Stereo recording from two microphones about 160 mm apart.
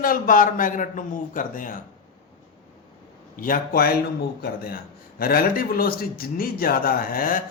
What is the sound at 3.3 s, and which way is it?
A man's voice, 60° left (ahead or behind).